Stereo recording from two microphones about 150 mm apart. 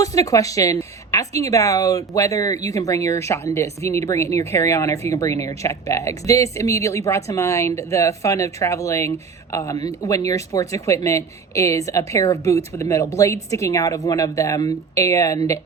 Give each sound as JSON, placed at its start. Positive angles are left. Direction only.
{"t": 0.0, "sound": "speech", "side_deg": 20}